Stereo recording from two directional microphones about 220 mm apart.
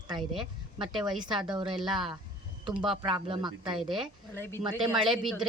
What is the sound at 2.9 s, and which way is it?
Speech, 25° right (ahead or behind).